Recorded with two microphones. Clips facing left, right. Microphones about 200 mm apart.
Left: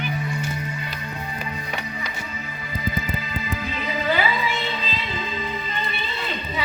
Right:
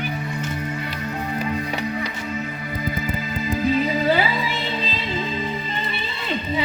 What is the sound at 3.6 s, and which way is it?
Music, 40° right (ahead or behind).